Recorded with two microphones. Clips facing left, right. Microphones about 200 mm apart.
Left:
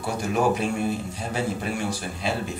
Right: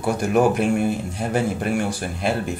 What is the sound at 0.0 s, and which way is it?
Speech, 55° right (ahead or behind).